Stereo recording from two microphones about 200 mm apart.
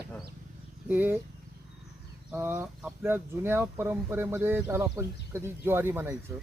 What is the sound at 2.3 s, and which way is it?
Speech, 10° right (ahead or behind).